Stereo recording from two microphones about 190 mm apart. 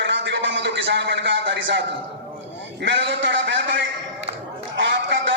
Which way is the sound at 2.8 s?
70° right (ahead or behind).